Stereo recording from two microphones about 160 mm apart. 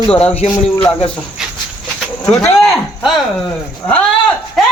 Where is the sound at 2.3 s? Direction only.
15° left (ahead or behind).